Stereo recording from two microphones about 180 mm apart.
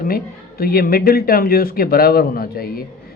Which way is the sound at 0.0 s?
55° left (ahead or behind).